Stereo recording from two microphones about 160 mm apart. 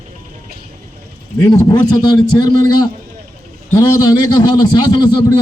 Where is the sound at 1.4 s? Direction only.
25° left (ahead or behind).